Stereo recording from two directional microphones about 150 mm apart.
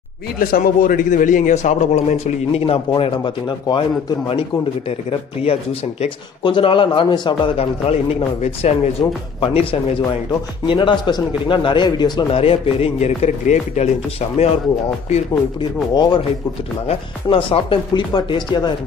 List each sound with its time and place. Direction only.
0.4 s a man's voice: 70° left (ahead or behind); by 13.8 s 50° left (ahead or behind)
15.9 s speech: 30° left (ahead or behind)